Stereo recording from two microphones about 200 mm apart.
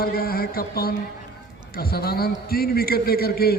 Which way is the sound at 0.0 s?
50° left (ahead or behind).